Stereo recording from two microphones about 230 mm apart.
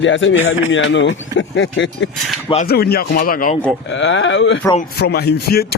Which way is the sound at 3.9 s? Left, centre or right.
Left.